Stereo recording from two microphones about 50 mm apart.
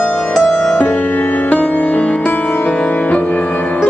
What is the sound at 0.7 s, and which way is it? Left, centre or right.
Music, left.